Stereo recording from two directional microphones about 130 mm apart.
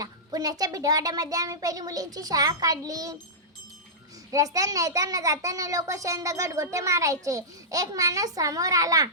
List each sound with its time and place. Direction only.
0.0 s a child's voice: 30° right (ahead or behind)
4.3 s a child's voice: 25° right (ahead or behind)